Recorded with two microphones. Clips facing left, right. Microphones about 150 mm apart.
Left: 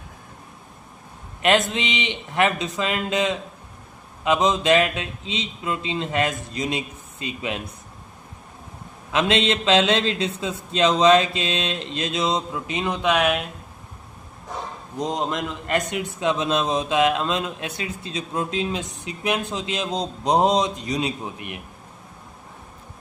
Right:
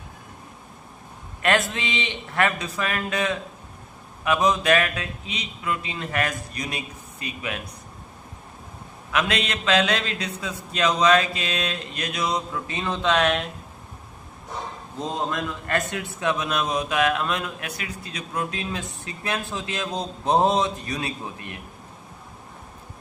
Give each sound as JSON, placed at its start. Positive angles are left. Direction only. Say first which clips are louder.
{"t": 1.4, "sound": "a man's voice", "louder": "left 3 dB", "side_deg": 20}
{"t": 9.1, "sound": "a man's voice", "louder": "left 5 dB", "side_deg": 25}
{"t": 14.9, "sound": "a man's voice", "louder": "left 2 dB", "side_deg": 15}